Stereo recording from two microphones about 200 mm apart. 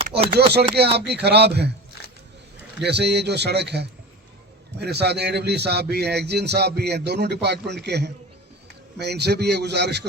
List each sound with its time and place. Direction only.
0.3 s a man's voice: 55° right (ahead or behind)
2.8 s a man's voice: 55° right (ahead or behind)